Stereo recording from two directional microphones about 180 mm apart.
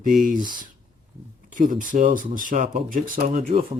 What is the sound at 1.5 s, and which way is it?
Speech, 50° right (ahead or behind).